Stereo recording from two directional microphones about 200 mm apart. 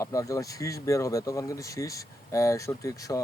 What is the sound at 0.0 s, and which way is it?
Speech, 15° left (ahead or behind).